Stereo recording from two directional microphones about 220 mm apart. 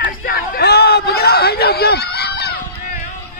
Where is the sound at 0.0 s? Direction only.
40° left (ahead or behind).